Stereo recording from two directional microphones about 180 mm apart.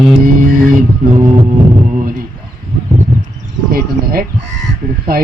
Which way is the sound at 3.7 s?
55° right (ahead or behind).